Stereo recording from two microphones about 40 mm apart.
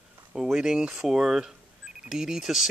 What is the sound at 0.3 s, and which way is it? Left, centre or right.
Speech, centre.